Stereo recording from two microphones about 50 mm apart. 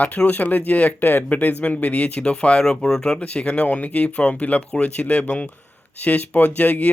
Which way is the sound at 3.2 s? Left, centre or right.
Left.